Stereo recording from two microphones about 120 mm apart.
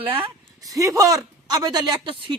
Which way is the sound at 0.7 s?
25° right (ahead or behind).